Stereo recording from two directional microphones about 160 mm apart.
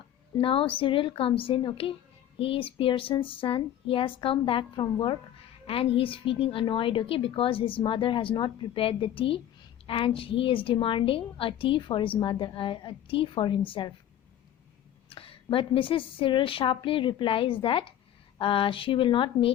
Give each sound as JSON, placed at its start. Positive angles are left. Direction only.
{"t": 0.3, "sound": "a woman's voice", "side_deg": 35}
{"t": 15.1, "sound": "a woman's voice", "side_deg": 35}